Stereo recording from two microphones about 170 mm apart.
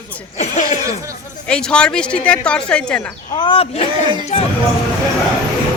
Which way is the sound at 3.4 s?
30° left (ahead or behind).